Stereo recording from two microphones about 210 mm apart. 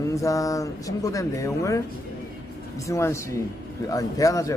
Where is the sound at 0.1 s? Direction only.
15° left (ahead or behind).